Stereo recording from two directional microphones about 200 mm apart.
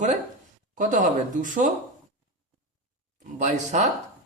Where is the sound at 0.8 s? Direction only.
40° right (ahead or behind).